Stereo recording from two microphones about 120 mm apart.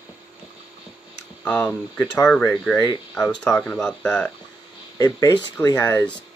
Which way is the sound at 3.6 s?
10° left (ahead or behind).